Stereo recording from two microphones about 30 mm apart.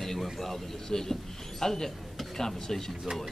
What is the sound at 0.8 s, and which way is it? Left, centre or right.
Speech, centre.